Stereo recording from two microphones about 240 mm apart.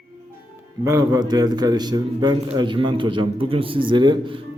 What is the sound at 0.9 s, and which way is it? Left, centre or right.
A man's voice, centre.